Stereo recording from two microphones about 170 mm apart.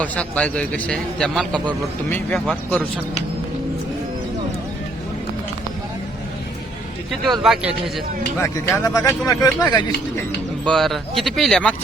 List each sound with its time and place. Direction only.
0.0 s a man's voice: 5° left (ahead or behind)
7.3 s speech: centre (ahead or behind)
8.4 s speech: 20° left (ahead or behind)
10.7 s speech: centre (ahead or behind)